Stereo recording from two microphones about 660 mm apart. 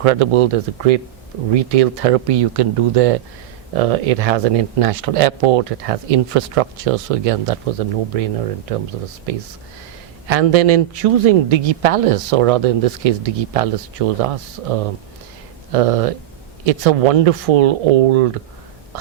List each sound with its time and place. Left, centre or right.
0.0 s speech: right
10.2 s speech: right